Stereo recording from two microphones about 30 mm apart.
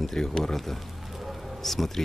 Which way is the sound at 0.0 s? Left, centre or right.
Centre.